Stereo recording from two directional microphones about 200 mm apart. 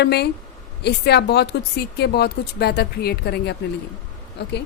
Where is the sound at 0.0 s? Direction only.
55° left (ahead or behind).